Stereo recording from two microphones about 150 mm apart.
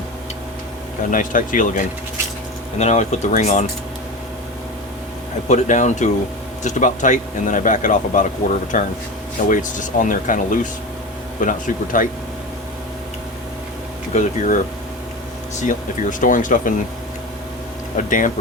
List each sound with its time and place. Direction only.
1.1 s speech: 65° left (ahead or behind)
2.7 s speech: 50° left (ahead or behind)
5.5 s speech: 55° left (ahead or behind)
14.2 s speech: 55° left (ahead or behind)
15.6 s speech: 60° left (ahead or behind)
17.9 s speech: 60° left (ahead or behind)